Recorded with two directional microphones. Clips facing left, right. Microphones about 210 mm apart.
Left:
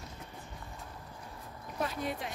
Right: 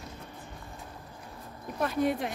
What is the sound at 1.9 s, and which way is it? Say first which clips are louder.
Speech: right 9 dB; 55° right (ahead or behind).